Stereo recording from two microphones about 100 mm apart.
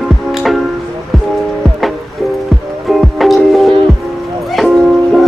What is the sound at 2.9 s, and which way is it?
Music, centre (ahead or behind).